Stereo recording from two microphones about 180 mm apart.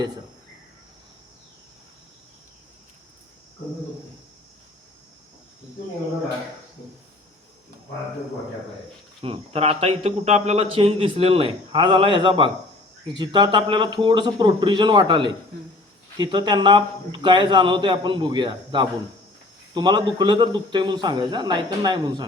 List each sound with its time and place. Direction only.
9.2 s a man's voice: 30° right (ahead or behind)